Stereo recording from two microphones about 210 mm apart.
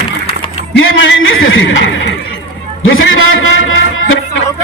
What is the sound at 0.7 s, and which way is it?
Speech, 65° left (ahead or behind).